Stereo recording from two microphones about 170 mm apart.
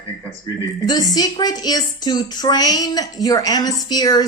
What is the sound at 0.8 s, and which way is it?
A woman's voice, 25° left (ahead or behind).